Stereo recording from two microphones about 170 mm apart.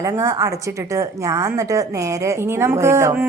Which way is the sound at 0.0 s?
20° right (ahead or behind).